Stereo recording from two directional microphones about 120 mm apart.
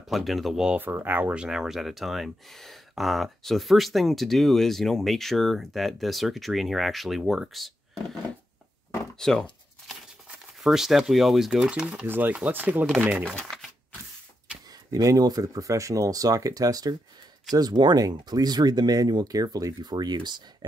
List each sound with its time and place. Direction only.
0.0 s speech: centre (ahead or behind)
0.7 s speech: 15° right (ahead or behind); by 8.2 s centre (ahead or behind)
9.2 s a sound: 5° left (ahead or behind)
10.2 s speech: 5° right (ahead or behind)
13.2 s speech: 5° left (ahead or behind)
14.7 s speech: 30° right (ahead or behind)